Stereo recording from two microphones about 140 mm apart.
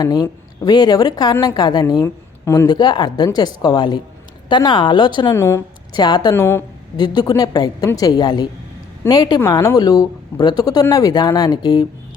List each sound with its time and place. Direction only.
0.0 s a woman's voice: 30° left (ahead or behind)
5.3 s a woman's voice: 20° left (ahead or behind)
5.9 s speech: 30° left (ahead or behind)
6.3 s speech: 15° left (ahead or behind)
6.9 s a woman's voice: 30° left (ahead or behind)
9.4 s a woman's voice: 20° left (ahead or behind)